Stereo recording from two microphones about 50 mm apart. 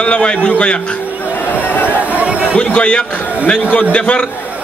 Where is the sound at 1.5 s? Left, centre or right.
Left.